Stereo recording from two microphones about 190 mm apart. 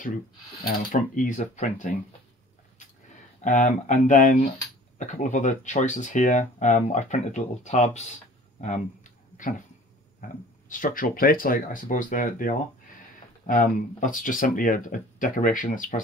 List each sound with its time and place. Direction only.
0.7 s speech: 45° left (ahead or behind)
3.3 s speech: 40° left (ahead or behind)
10.2 s speech: 45° left (ahead or behind)